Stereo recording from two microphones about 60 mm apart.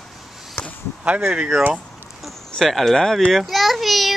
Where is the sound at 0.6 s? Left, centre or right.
Left.